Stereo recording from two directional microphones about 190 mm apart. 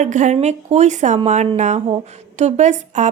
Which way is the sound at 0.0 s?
40° right (ahead or behind).